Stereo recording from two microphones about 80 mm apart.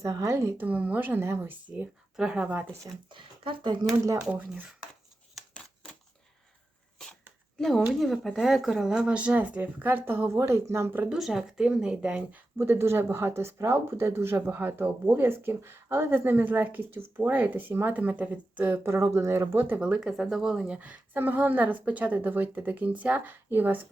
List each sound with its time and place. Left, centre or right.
0.0 s speech: right
0.5 s speech: right
2.1 s speech: centre
3.1 s speech: right
4.2 s speech: centre
5.5 s a sound: centre
7.6 s a woman's voice: centre; by 11.1 s right
11.1 s speech: centre
12.5 s speech: right
19.5 s speech: right
19.8 s a woman's voice: centre
20.7 s speech: centre